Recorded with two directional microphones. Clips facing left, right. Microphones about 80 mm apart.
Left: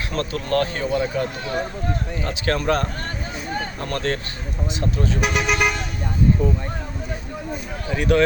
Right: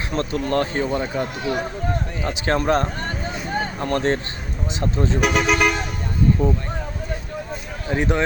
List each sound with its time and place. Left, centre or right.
0.1 s speech: right
3.2 s vehicle: right
4.8 s speech: right
5.2 s speech: centre
7.9 s speech: right